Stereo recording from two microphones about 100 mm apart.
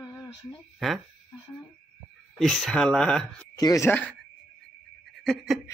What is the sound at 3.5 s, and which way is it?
Speech, 40° left (ahead or behind).